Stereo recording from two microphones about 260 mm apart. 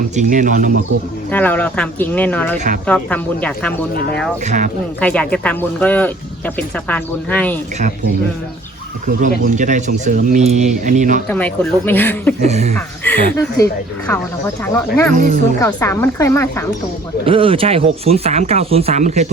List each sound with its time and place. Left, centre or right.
0.2 s speech: right
1.3 s speech: centre
4.4 s speech: right
4.9 s speech: centre
9.6 s speech: right
11.3 s speech: centre
12.4 s speech: right
12.7 s speech: centre
15.1 s speech: right
15.6 s speech: centre
17.2 s speech: right